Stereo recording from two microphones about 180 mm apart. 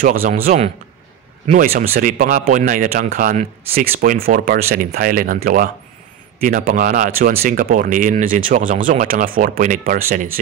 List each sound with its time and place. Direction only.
0.0 s speech: 50° right (ahead or behind)